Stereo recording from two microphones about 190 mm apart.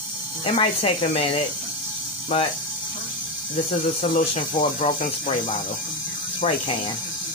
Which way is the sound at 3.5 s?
30° left (ahead or behind).